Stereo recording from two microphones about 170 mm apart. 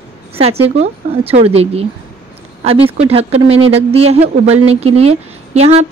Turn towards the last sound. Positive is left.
turn(degrees=-40)  # may be behind; listen again after turning